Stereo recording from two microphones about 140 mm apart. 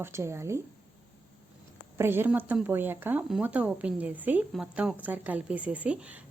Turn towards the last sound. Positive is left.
turn(degrees=-10)  # may be behind; listen again after turning